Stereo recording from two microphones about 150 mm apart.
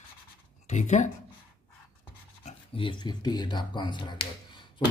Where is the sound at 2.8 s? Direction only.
30° left (ahead or behind).